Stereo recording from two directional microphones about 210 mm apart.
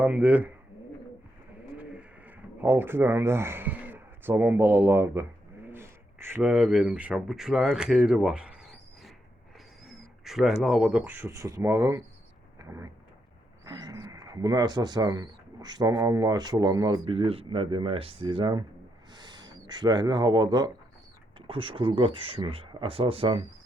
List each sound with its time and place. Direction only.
0.0 s speech: 5° right (ahead or behind)
1.7 s bird: 5° right (ahead or behind)
5.6 s a sound: 10° right (ahead or behind)
6.5 s speech: centre (ahead or behind)
12.5 s vehicle: 15° right (ahead or behind)
13.7 s speech: 20° right (ahead or behind)